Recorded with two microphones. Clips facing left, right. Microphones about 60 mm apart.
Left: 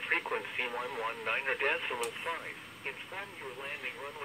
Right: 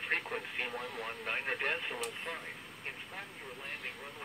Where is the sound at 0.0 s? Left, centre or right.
Left.